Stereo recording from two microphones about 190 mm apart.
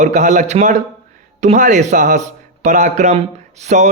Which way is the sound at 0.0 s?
40° right (ahead or behind).